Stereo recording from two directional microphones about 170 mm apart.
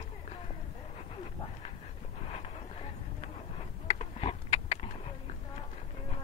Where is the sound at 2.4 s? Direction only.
35° left (ahead or behind).